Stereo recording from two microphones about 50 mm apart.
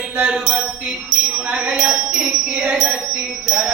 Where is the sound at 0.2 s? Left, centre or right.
Centre.